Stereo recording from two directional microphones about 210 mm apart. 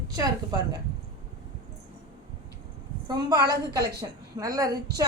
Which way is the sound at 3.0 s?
20° right (ahead or behind).